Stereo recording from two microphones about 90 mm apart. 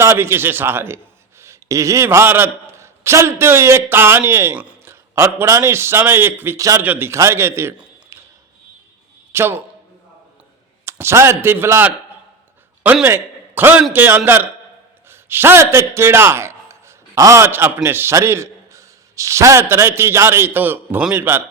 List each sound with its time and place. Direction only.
0.0 s a man's voice: 30° right (ahead or behind)
4.5 s speech: 15° right (ahead or behind)
4.9 s a man's voice: 30° right (ahead or behind)
6.6 s a man's voice: 40° right (ahead or behind)
6.8 s a man's voice: 15° right (ahead or behind)
7.1 s a man's voice: 30° right (ahead or behind)
8.1 s a sound: 30° right (ahead or behind)
9.3 s speech: 25° right (ahead or behind)
10.8 s a man's voice: 30° right (ahead or behind)
13.1 s a man's voice: 25° right (ahead or behind)